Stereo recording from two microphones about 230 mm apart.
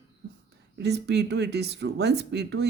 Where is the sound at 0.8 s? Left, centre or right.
Right.